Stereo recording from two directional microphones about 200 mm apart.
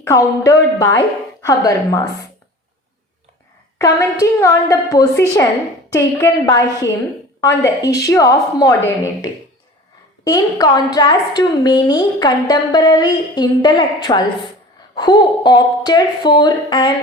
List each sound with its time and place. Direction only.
0.0 s a woman's voice: 15° left (ahead or behind)
3.8 s a woman's voice: 15° left (ahead or behind)
10.2 s a woman's voice: 20° left (ahead or behind)